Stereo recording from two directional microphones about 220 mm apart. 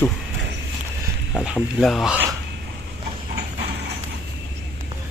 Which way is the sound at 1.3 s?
Centre (ahead or behind).